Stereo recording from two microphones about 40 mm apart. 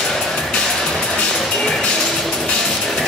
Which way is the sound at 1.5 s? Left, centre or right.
Centre.